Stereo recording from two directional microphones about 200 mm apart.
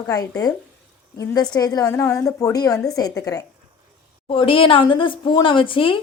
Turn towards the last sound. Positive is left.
turn(degrees=25)  # may be behind; listen again after turning